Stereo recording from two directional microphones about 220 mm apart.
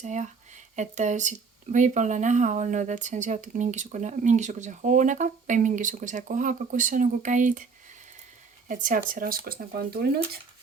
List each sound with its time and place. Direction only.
0.0 s speech: 35° right (ahead or behind)
8.6 s speech: 35° right (ahead or behind)